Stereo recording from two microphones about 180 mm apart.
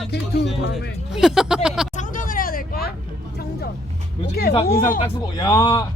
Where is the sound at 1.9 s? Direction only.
45° left (ahead or behind); by 3.7 s 60° left (ahead or behind).